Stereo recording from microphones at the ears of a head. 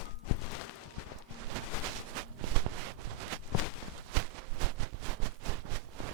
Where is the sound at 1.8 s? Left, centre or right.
Right.